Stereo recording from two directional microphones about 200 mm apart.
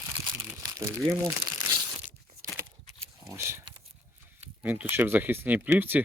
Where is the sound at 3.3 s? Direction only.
10° right (ahead or behind).